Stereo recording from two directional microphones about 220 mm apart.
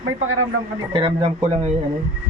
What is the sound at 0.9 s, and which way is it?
Speech, 25° right (ahead or behind).